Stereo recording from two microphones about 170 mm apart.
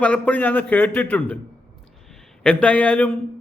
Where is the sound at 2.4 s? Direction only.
10° left (ahead or behind).